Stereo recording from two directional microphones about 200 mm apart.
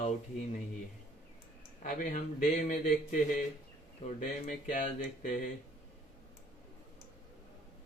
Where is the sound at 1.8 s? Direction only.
35° left (ahead or behind).